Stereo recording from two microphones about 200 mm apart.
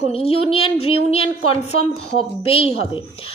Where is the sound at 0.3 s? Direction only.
30° left (ahead or behind).